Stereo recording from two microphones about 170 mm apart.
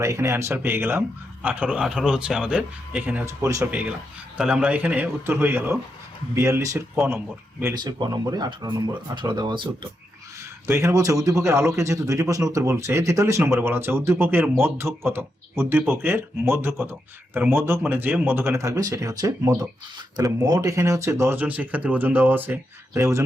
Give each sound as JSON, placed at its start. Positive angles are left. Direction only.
{"t": 0.0, "sound": "speech", "side_deg": -15}
{"t": 10.7, "sound": "speech", "side_deg": -15}